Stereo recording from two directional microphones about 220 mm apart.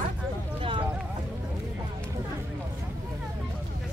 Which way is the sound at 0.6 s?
25° right (ahead or behind).